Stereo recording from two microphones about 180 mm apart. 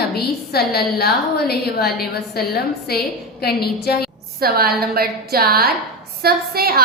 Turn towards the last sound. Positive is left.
turn(degrees=-60)  # may be behind; listen again after turning